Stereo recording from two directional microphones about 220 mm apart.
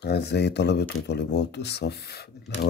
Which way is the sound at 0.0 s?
50° left (ahead or behind).